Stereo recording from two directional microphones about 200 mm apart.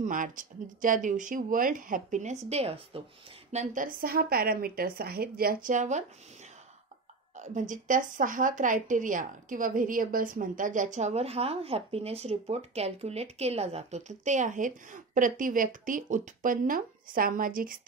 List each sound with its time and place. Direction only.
0.0 s speech: 40° right (ahead or behind)
3.5 s a woman's voice: 40° right (ahead or behind)
7.3 s speech: 40° right (ahead or behind)